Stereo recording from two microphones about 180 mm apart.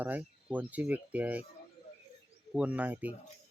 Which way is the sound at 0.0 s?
10° right (ahead or behind).